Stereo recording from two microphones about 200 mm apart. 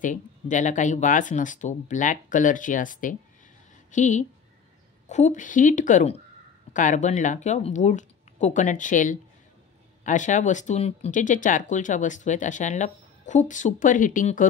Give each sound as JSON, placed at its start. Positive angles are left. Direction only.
{"t": 0.0, "sound": "speech", "side_deg": 40}